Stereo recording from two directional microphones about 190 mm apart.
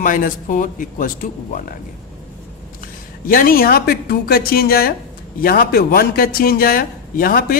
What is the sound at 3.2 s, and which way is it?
A man's voice, 50° left (ahead or behind).